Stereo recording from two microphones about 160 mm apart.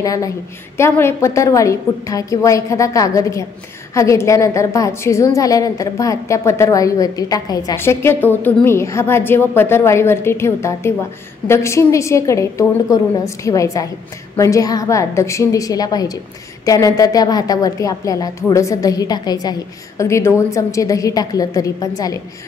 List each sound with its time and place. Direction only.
0.0 s a woman's voice: 20° left (ahead or behind)